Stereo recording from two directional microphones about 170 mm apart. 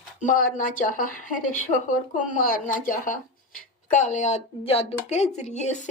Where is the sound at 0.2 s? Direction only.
50° left (ahead or behind).